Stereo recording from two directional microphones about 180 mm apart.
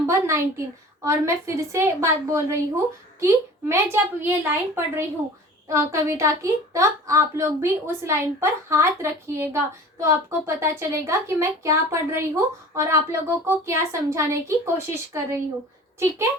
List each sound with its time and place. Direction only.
0.0 s a woman's voice: 15° right (ahead or behind)